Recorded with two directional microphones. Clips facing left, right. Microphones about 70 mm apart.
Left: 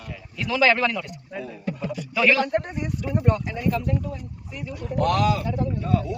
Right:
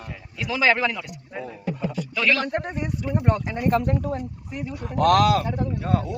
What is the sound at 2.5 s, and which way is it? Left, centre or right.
Speech, right.